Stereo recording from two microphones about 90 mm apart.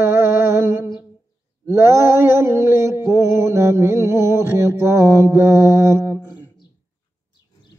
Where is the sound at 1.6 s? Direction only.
30° right (ahead or behind).